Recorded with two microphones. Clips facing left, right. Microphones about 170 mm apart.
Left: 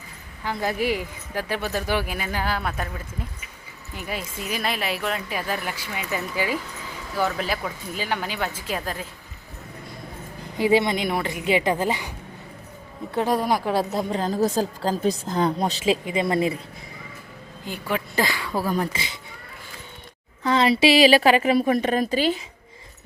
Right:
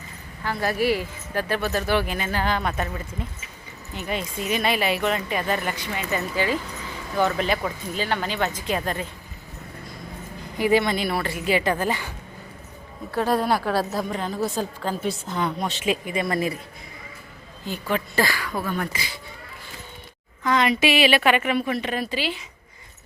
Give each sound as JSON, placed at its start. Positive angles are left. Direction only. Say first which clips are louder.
{"t": 0.4, "sound": "speech", "louder": "right 2 dB", "side_deg": 20}
{"t": 10.6, "sound": "a woman's voice", "louder": "left 1 dB", "side_deg": 25}
{"t": 14.2, "sound": "a woman's voice", "louder": "left 4 dB", "side_deg": 40}
{"t": 17.7, "sound": "speech", "louder": "right 1 dB", "side_deg": 10}
{"t": 18.5, "sound": "speech", "louder": "left 3 dB", "side_deg": 35}
{"t": 18.9, "sound": "a woman's voice", "louder": "left 1 dB", "side_deg": 25}
{"t": 20.4, "sound": "speech", "louder": "left 2 dB", "side_deg": 30}